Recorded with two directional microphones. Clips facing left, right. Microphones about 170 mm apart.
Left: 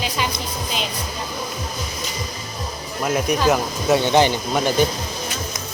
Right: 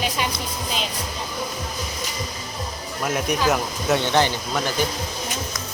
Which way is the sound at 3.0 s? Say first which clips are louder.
Left 3 dB; centre (ahead or behind).